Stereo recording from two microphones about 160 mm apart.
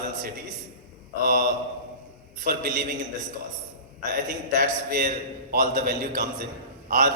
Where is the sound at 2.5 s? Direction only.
55° right (ahead or behind).